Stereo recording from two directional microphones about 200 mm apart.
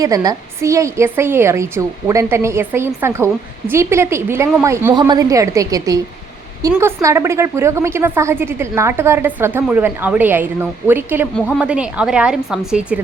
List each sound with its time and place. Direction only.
0.0 s a woman's voice: 15° right (ahead or behind)